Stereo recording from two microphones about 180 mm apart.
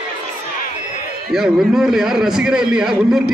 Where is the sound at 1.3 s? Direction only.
Centre (ahead or behind).